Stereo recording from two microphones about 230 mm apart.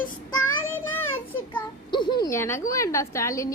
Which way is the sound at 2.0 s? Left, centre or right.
Centre.